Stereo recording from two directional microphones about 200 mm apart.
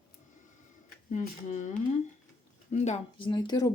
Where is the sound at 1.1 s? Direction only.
40° left (ahead or behind).